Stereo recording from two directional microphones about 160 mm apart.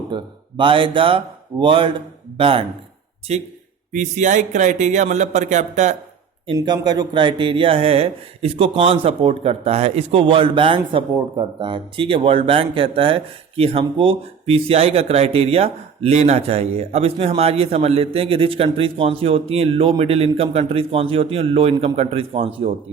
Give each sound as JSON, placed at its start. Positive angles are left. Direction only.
{"t": 0.1, "sound": "speech", "side_deg": -30}
{"t": 6.5, "sound": "speech", "side_deg": -25}